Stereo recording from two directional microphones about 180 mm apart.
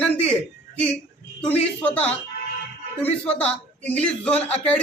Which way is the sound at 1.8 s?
5° left (ahead or behind).